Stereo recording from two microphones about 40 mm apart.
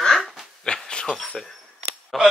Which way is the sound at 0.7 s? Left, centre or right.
Left.